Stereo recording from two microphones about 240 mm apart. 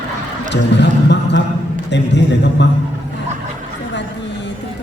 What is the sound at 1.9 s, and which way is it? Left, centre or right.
Speech, left.